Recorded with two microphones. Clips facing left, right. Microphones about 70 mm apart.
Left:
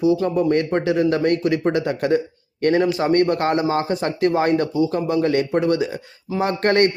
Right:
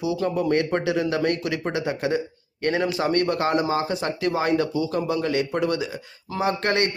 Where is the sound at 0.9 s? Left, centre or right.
Left.